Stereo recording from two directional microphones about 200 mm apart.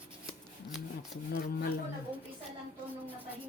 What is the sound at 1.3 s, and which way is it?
Speech, 55° left (ahead or behind).